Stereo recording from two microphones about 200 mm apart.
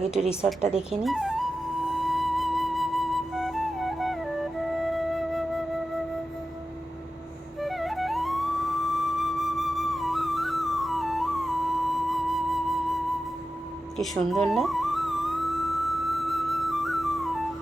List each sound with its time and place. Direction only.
0.1 s speech: 5° right (ahead or behind)
2.0 s flute: centre (ahead or behind)
7.6 s music: centre (ahead or behind)